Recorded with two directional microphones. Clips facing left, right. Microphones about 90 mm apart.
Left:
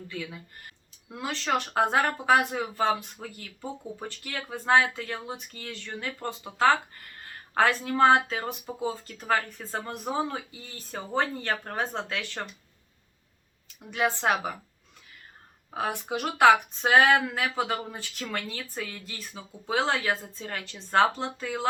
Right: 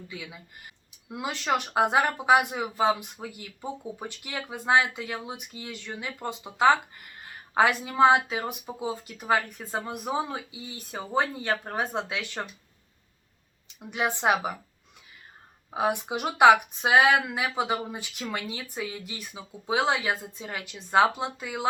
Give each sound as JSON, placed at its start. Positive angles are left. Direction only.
{"t": 0.1, "sound": "speech", "side_deg": -10}
{"t": 13.7, "sound": "speech", "side_deg": -20}
{"t": 15.7, "sound": "speech", "side_deg": -15}